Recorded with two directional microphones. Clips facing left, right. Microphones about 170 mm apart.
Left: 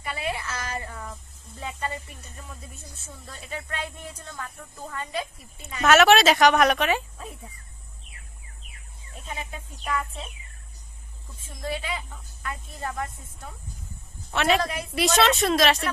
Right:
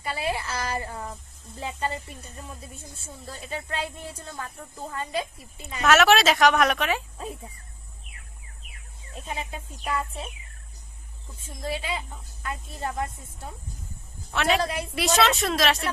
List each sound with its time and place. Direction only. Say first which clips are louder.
0.0 s a woman's voice: right 2 dB; 30° right (ahead or behind)
5.8 s a woman's voice: left 2 dB; centre (ahead or behind)
9.2 s a woman's voice: right 2 dB; 25° right (ahead or behind)
11.4 s a woman's voice: even; 25° right (ahead or behind)
14.3 s a woman's voice: left 1 dB; centre (ahead or behind)
14.6 s speech: right 1 dB; 30° right (ahead or behind)
14.9 s a woman's voice: left 2 dB; centre (ahead or behind)